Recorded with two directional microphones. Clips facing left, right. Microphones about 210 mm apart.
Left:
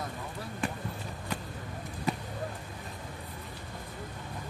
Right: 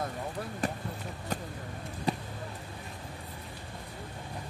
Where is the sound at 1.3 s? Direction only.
40° right (ahead or behind).